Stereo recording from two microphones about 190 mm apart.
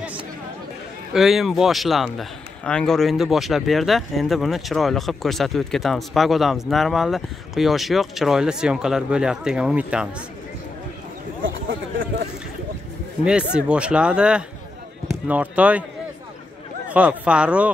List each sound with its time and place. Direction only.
1.1 s a man's voice: centre (ahead or behind)
13.2 s a man's voice: 5° right (ahead or behind)
16.9 s speech: 5° right (ahead or behind)